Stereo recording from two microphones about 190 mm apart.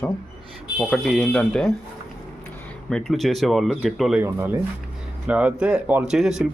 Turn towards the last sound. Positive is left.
turn(degrees=0)  # may be behind; listen again after turning